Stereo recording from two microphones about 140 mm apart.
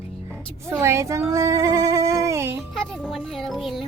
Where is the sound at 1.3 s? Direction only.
20° right (ahead or behind).